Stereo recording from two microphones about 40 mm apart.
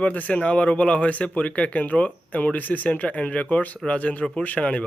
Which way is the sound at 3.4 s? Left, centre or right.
Left.